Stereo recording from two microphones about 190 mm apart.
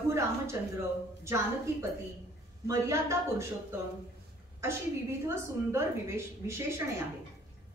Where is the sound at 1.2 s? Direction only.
15° right (ahead or behind).